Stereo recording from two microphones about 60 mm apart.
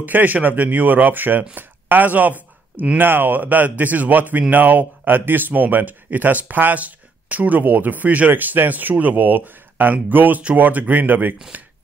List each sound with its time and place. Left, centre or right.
0.0 s speech: right